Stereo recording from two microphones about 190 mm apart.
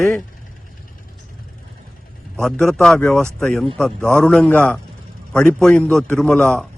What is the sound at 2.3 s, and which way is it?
A man's voice, 5° left (ahead or behind).